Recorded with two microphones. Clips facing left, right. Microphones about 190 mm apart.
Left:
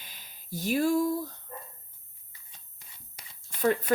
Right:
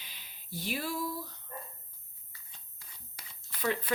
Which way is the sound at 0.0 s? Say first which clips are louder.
Left 3 dB; 45° left (ahead or behind).